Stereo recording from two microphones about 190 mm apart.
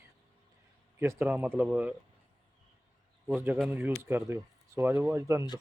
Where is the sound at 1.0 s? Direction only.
10° right (ahead or behind).